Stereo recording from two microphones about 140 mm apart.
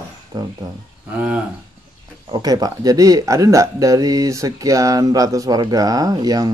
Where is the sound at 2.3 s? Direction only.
25° right (ahead or behind).